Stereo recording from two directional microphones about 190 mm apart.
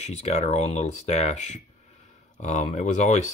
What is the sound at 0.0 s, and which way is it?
Speech, 35° left (ahead or behind).